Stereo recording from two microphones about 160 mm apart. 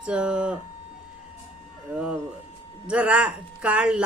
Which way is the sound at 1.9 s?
10° right (ahead or behind).